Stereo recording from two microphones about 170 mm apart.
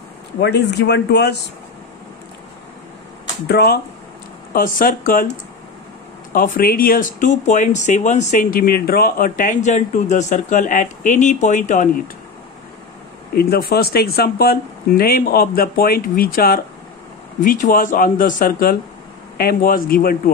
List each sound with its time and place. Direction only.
0.4 s speech: 80° left
3.4 s speech: 70° left (ahead or behind)
4.6 s speech: 55° left (ahead or behind)
13.3 s speech: 65° left (ahead or behind)